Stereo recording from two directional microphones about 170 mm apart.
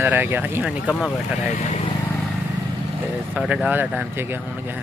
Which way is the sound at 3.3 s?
10° right (ahead or behind).